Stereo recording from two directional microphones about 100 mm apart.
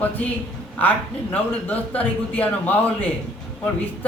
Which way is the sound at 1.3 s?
15° left (ahead or behind).